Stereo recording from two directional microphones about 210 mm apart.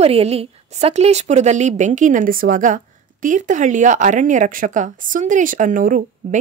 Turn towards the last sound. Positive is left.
turn(degrees=-40)  # may be behind; listen again after turning